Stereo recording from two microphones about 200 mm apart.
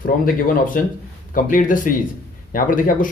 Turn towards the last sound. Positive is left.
turn(degrees=45)  # may be behind; listen again after turning